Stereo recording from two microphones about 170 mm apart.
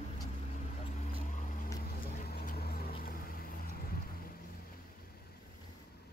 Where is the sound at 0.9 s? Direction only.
45° left (ahead or behind).